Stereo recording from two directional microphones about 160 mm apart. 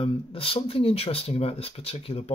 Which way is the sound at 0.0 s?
35° left (ahead or behind).